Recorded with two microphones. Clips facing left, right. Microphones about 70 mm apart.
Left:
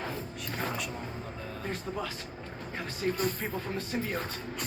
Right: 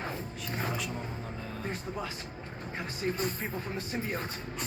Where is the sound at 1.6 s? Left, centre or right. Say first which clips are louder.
Left 2 dB; right.